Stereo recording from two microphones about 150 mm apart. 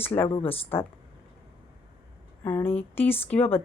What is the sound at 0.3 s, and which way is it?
Speech, 35° left (ahead or behind).